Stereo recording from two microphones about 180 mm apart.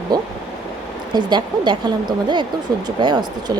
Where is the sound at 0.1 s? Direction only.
25° right (ahead or behind).